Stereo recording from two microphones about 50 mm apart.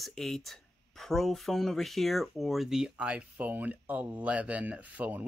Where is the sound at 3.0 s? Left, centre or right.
Right.